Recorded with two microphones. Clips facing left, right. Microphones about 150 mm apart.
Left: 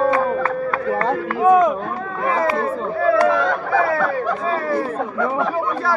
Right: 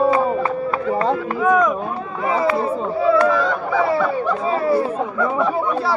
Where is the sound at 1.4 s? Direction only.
25° left (ahead or behind).